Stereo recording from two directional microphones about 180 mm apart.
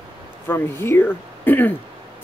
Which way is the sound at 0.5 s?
10° left (ahead or behind).